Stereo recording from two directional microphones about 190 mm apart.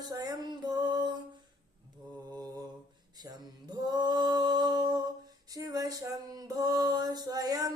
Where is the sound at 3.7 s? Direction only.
20° right (ahead or behind).